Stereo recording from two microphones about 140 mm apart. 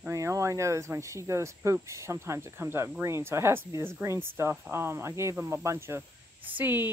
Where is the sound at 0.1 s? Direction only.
20° right (ahead or behind).